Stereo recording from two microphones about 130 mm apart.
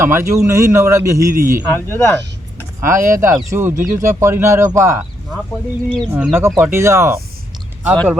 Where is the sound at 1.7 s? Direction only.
20° left (ahead or behind).